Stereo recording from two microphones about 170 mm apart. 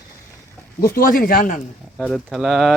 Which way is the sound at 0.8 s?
55° left (ahead or behind).